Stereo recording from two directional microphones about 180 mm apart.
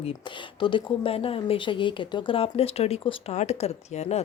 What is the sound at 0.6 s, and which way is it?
Speech, 30° left (ahead or behind).